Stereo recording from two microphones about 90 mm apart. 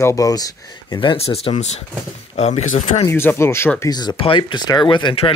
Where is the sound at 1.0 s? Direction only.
80° left.